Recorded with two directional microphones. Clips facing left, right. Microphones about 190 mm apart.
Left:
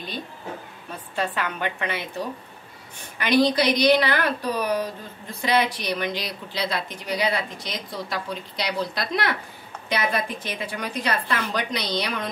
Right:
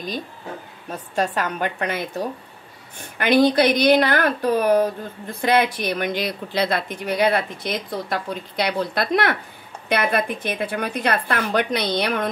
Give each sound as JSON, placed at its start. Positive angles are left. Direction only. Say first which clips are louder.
{"t": 1.1, "sound": "speech", "louder": "right 4 dB", "side_deg": -45}
{"t": 3.2, "sound": "a woman's voice", "louder": "right 4 dB", "side_deg": -55}